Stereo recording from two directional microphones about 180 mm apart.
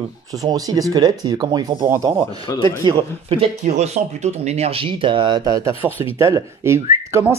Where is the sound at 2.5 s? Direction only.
20° left (ahead or behind).